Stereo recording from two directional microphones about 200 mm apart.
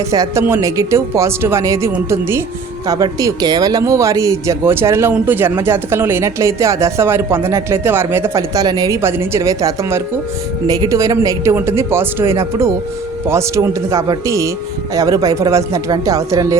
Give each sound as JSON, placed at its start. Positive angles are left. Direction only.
{"t": 0.1, "sound": "speech", "side_deg": -15}